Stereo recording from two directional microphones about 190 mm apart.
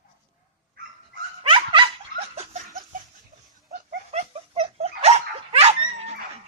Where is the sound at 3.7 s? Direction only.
40° right (ahead or behind).